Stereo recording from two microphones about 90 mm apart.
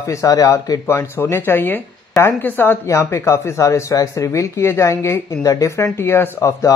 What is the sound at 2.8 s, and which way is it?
Speech, 35° left (ahead or behind).